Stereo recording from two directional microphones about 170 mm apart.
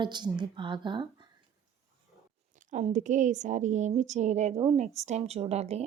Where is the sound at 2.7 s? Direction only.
45° right (ahead or behind).